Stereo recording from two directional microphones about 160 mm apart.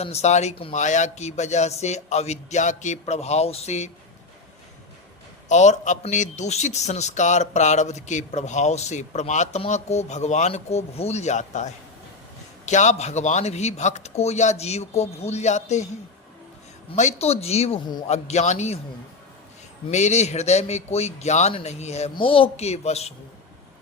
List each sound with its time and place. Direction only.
0.0 s a man's voice: 40° left (ahead or behind)
5.5 s a man's voice: 50° left (ahead or behind)
16.9 s a man's voice: 45° left (ahead or behind)
19.9 s a man's voice: 45° left (ahead or behind)